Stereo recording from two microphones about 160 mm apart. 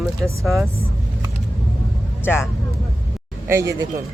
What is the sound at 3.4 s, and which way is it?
Speech, 15° right (ahead or behind).